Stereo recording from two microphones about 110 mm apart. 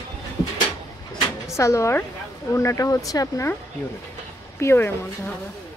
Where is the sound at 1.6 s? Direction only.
25° left (ahead or behind).